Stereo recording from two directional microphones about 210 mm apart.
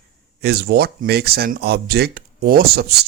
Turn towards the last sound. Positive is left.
turn(degrees=-45)  # may be behind; listen again after turning